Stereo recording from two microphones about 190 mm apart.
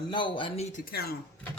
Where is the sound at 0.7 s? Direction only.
50° left (ahead or behind).